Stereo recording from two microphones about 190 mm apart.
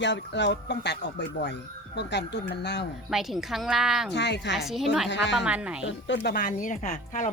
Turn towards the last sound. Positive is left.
turn(degrees=40)  # may be behind; listen again after turning